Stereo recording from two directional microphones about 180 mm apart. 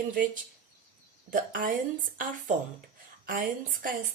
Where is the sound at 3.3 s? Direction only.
50° right (ahead or behind).